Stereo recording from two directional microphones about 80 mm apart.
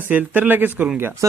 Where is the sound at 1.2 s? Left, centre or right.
Right.